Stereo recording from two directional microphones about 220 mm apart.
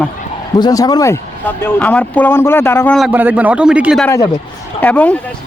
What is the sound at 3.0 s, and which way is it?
Speech, 5° right (ahead or behind).